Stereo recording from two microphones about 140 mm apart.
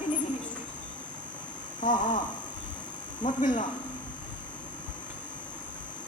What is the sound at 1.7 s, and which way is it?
A woman's voice, 65° left (ahead or behind).